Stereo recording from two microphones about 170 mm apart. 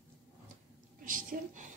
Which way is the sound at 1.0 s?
55° right (ahead or behind).